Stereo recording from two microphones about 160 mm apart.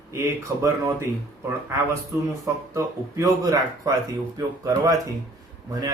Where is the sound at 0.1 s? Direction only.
20° right (ahead or behind).